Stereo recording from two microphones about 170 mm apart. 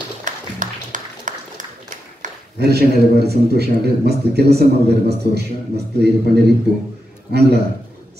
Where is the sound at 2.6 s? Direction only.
70° right (ahead or behind).